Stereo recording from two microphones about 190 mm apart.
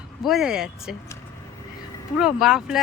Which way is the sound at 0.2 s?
Centre (ahead or behind).